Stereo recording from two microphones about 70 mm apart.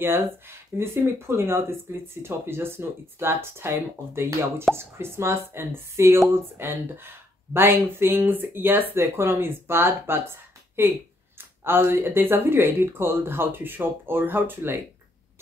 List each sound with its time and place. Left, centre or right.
0.0 s speech: right